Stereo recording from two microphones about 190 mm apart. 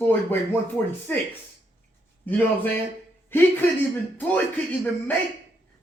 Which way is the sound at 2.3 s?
10° left (ahead or behind).